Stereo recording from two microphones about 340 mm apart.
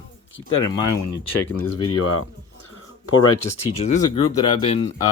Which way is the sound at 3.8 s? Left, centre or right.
Centre.